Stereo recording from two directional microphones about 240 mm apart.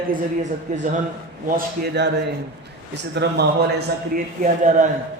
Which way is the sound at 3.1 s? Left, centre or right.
Right.